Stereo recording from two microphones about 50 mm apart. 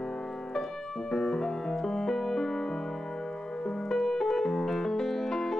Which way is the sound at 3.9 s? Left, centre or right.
Centre.